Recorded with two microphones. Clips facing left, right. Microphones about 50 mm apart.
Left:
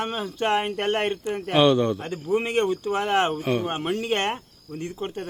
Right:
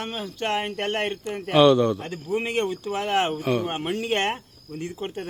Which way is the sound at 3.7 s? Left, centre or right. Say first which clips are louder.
Left 1 dB; centre.